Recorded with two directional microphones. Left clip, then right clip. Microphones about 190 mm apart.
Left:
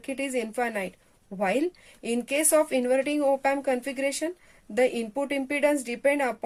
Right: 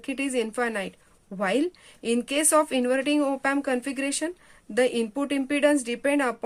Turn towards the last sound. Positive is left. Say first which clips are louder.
# even
turn(degrees=-30)  # may be behind; listen again after turning